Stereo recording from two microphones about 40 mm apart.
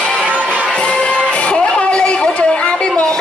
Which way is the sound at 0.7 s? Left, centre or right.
Left.